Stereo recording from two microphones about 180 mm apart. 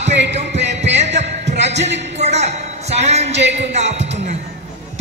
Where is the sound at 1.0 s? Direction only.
75° right (ahead or behind).